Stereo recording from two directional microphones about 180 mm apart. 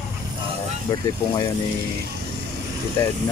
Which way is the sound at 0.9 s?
20° left (ahead or behind).